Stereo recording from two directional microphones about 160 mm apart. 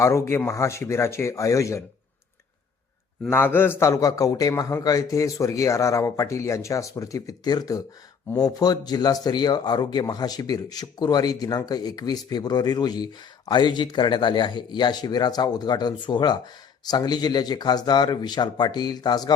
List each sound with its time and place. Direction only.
0.0 s speech: 20° left (ahead or behind)
3.2 s speech: 15° left (ahead or behind)